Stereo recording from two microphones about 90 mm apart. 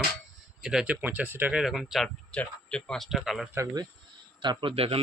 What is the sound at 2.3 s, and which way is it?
A man's voice, 15° left (ahead or behind).